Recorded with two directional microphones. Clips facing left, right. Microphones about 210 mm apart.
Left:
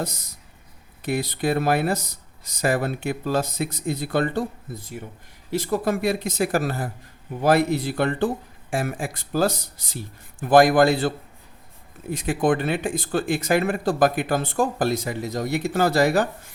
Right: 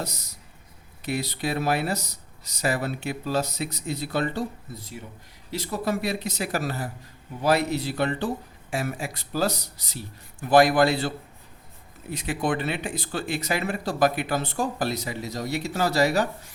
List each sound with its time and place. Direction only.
0.0 s speech: 50° left (ahead or behind)
12.1 s speech: 50° left (ahead or behind)